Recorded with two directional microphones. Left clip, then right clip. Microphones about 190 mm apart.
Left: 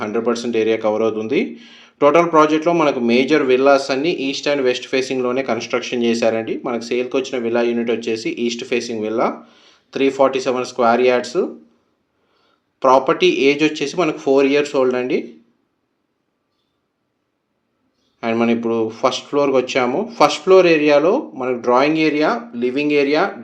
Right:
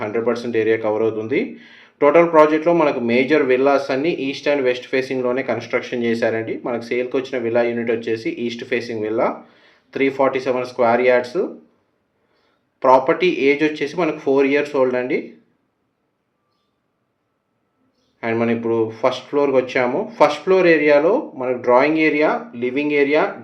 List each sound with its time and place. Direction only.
0.0 s speech: 35° left (ahead or behind)
12.8 s speech: 35° left (ahead or behind)
18.2 s speech: 30° left (ahead or behind)